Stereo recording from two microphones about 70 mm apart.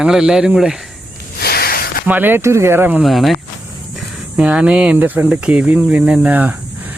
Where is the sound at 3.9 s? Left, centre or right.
Centre.